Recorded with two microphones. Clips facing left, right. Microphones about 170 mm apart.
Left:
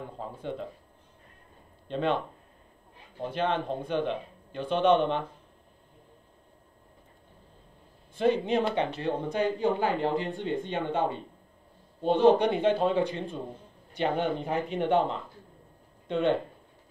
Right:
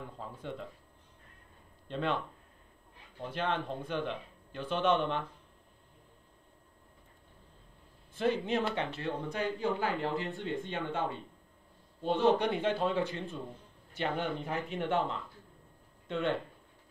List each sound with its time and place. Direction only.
0.0 s speech: 25° left (ahead or behind)
1.9 s speech: 20° left (ahead or behind)
8.2 s speech: 20° left (ahead or behind)